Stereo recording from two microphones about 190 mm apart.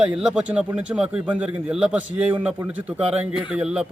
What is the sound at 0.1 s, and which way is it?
A man's voice, 5° right (ahead or behind).